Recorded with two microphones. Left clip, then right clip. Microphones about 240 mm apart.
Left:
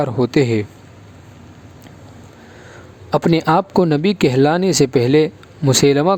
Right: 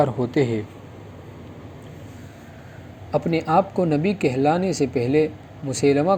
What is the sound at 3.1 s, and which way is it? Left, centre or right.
Speech, left.